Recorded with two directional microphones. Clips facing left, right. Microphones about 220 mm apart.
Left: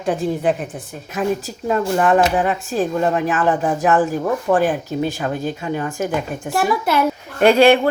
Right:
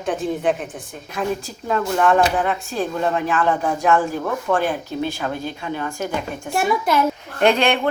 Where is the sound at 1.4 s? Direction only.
35° left (ahead or behind).